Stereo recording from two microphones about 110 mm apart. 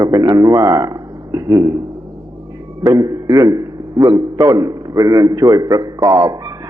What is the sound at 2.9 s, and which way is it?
A man's voice, 35° right (ahead or behind).